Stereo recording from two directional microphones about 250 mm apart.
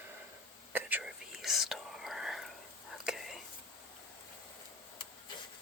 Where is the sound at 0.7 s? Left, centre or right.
Centre.